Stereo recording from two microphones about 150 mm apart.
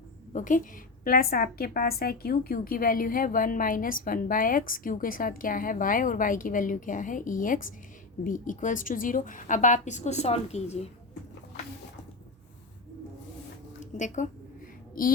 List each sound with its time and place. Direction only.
0.3 s a woman's voice: 60° left (ahead or behind)
13.9 s a woman's voice: 55° left (ahead or behind)
15.0 s a woman's voice: 70° left (ahead or behind)